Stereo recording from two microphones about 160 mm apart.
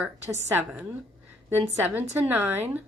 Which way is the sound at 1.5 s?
15° right (ahead or behind).